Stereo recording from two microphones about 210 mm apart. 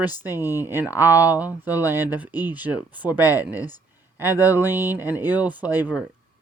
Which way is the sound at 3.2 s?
15° left (ahead or behind).